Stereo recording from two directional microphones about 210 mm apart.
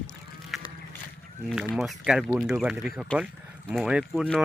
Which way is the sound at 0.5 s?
Centre (ahead or behind).